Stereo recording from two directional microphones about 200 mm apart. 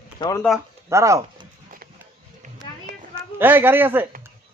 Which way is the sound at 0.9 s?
15° right (ahead or behind).